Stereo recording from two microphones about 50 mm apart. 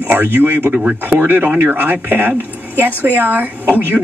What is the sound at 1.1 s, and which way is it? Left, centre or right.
Speech, right.